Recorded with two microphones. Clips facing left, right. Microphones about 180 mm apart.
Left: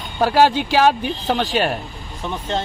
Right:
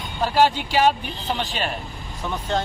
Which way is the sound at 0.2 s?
75° left (ahead or behind).